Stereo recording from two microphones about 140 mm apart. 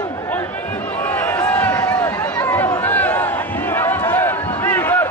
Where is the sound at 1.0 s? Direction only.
15° left (ahead or behind).